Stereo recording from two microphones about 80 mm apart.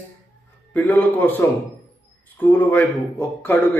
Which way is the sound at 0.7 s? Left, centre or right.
Centre.